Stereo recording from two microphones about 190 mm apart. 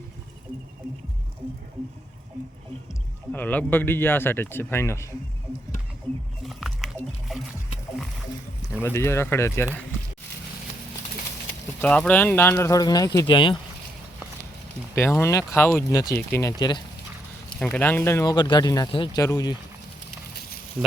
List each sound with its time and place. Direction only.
3.3 s speech: 10° left (ahead or behind)
6.4 s biting: centre (ahead or behind)
8.8 s speech: 15° left (ahead or behind)
11.8 s speech: 5° left (ahead or behind); by 13.6 s 25° left (ahead or behind)
14.9 s speech: 10° left (ahead or behind)
17.6 s speech: 5° left (ahead or behind)